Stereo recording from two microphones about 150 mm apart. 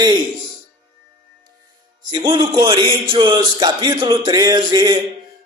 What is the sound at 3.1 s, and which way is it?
Music, 30° right (ahead or behind).